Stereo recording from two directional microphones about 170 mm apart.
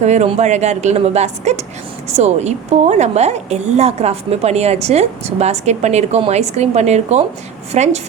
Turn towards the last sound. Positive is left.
turn(degrees=-40)  # may be behind; listen again after turning